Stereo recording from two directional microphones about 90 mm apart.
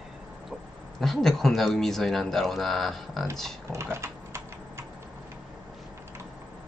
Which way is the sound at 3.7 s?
30° right (ahead or behind).